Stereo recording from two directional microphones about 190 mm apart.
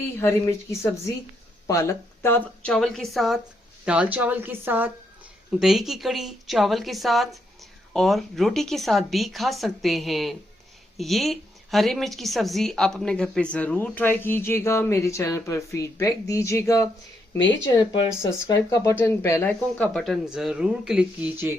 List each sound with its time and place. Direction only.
0.2 s a woman's voice: 15° left (ahead or behind)
17.3 s speech: 75° left (ahead or behind)
18.2 s speech: 15° left (ahead or behind); by 21.5 s 5° right (ahead or behind)